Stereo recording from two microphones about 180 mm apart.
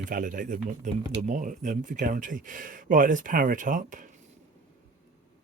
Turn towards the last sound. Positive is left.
turn(degrees=-45)  # may be behind; listen again after turning